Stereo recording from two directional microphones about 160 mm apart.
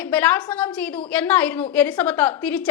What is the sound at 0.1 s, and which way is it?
A woman's voice, 10° left (ahead or behind).